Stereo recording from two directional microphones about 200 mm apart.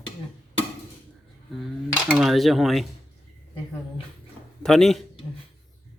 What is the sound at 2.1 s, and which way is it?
Speech, centre (ahead or behind).